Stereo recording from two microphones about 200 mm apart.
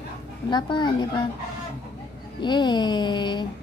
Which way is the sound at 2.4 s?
20° left (ahead or behind).